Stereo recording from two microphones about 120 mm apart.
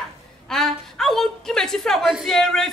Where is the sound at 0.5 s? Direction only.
5° left (ahead or behind).